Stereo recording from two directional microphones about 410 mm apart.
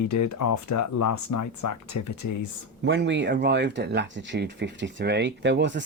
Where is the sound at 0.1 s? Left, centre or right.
Left.